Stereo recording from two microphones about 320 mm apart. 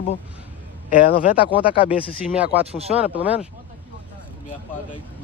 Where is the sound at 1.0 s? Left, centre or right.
Left.